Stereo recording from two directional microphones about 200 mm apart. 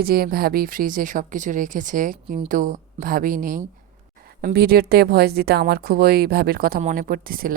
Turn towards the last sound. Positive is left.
turn(degrees=-45)  # may be behind; listen again after turning